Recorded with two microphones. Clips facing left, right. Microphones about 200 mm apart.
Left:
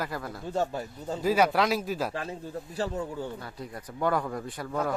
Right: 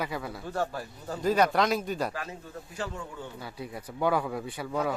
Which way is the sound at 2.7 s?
35° left (ahead or behind).